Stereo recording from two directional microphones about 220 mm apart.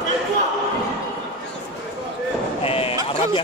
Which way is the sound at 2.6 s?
25° left (ahead or behind).